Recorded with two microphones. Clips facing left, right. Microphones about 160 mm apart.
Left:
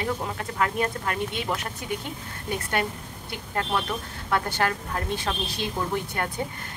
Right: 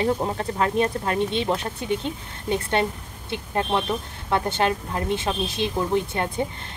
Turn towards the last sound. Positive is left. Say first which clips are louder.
# right 5 dB
turn(degrees=-20)  # may be behind; listen again after turning